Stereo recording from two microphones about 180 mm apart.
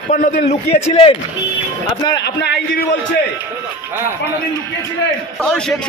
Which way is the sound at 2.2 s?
65° left (ahead or behind).